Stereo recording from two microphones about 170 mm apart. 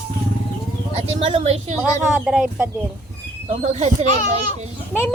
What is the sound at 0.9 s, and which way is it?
Speech, 35° right (ahead or behind).